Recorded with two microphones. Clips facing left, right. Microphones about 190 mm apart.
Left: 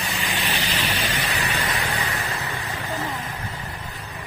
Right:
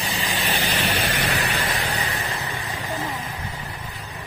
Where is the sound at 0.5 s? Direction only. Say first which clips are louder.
Right 2 dB; 50° right (ahead or behind).